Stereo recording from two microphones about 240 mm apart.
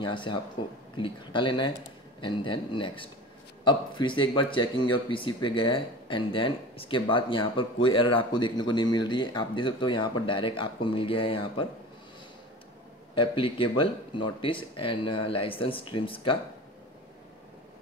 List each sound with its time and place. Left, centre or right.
0.0 s speech: centre
13.1 s speech: left